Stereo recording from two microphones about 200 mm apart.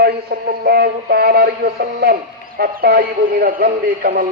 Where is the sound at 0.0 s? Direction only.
50° right (ahead or behind).